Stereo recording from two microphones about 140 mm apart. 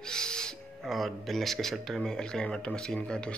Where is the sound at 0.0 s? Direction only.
5° left (ahead or behind).